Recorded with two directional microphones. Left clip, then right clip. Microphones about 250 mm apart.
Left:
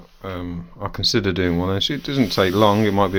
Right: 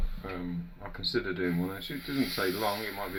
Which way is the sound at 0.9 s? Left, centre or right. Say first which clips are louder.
Left 11 dB; left.